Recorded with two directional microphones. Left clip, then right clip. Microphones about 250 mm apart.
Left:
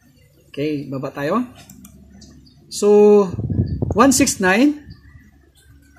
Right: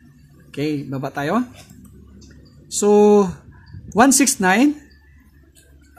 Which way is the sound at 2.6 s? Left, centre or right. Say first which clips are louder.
Left 2 dB; centre.